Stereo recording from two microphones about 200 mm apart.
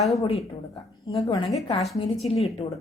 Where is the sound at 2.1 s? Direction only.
Centre (ahead or behind).